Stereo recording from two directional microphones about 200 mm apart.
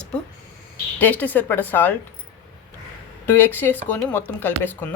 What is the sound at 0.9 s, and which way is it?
Speech, 10° left (ahead or behind).